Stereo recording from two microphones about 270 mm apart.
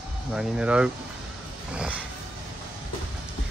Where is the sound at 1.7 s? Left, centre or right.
Centre.